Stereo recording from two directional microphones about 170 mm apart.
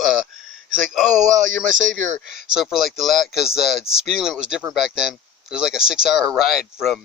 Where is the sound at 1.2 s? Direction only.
45° right (ahead or behind).